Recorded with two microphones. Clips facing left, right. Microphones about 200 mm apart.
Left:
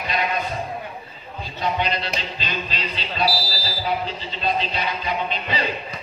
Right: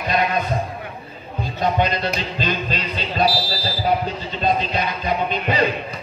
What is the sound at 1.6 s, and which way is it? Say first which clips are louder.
Speech: right 4 dB; 45° right (ahead or behind).